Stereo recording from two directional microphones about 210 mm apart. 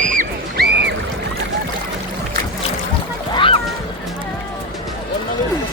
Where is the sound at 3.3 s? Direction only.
25° left (ahead or behind).